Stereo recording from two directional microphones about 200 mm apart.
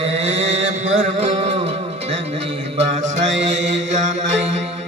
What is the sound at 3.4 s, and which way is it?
Mantra, 35° right (ahead or behind).